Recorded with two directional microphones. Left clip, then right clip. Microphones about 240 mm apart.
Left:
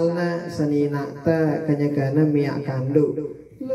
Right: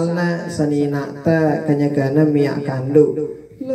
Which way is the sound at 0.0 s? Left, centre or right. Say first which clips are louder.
Right 2 dB; right.